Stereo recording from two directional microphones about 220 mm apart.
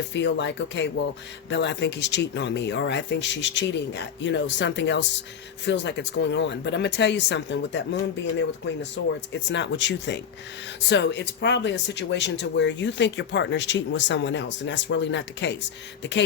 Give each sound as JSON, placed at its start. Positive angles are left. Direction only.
{"t": 0.1, "sound": "speech", "side_deg": 55}